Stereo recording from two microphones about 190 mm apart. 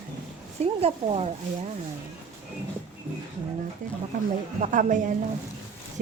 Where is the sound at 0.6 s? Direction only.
30° right (ahead or behind).